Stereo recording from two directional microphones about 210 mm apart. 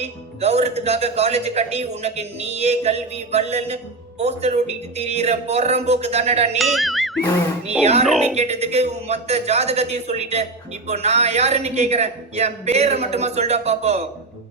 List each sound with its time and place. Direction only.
0.0 s speech: 30° right (ahead or behind)
6.6 s music: centre (ahead or behind)
7.7 s speech: 30° right (ahead or behind)